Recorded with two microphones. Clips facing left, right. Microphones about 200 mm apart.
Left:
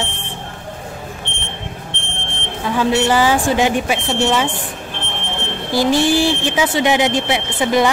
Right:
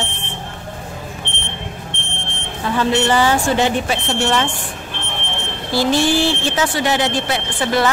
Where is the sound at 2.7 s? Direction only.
10° left (ahead or behind).